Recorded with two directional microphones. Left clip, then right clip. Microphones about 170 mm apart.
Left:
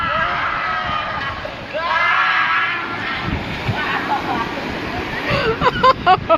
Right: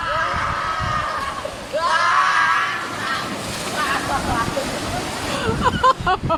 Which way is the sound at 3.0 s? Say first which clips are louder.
Left 1 dB; 20° right (ahead or behind).